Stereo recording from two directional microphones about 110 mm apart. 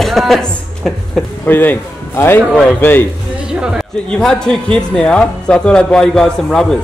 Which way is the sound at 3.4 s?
10° right (ahead or behind).